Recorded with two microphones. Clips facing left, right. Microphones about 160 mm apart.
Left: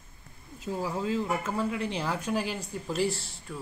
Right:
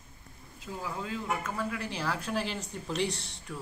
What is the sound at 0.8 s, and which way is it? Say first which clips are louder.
Speech: left 7 dB; 35° left (ahead or behind).